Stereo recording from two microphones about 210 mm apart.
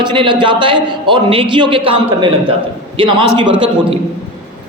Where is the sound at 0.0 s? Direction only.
20° right (ahead or behind).